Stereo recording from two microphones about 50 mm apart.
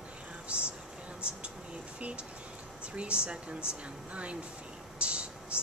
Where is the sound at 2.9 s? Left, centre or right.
Right.